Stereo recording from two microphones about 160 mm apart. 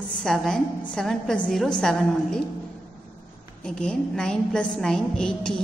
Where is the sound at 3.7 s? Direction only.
5° left (ahead or behind).